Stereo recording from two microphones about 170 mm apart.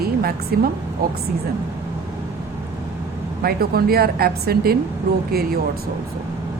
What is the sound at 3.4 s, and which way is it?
Speech, 65° right (ahead or behind).